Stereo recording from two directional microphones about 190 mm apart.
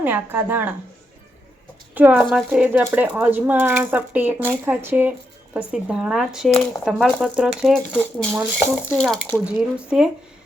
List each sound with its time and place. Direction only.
0.0 s speech: 10° right (ahead or behind)
2.0 s speech: 10° right (ahead or behind)